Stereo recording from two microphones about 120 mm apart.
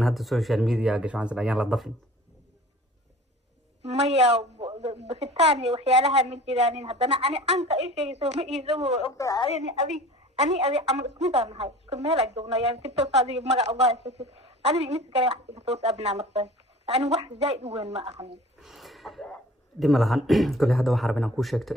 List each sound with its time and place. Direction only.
0.0 s a man's voice: centre (ahead or behind)
3.9 s speech: 60° right (ahead or behind)
9.1 s a woman's voice: 25° left (ahead or behind)
9.9 s speech: 65° right (ahead or behind)
18.6 s a sound: centre (ahead or behind)
19.8 s a man's voice: centre (ahead or behind)